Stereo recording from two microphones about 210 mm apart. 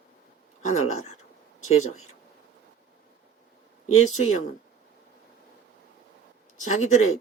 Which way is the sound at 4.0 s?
30° left (ahead or behind).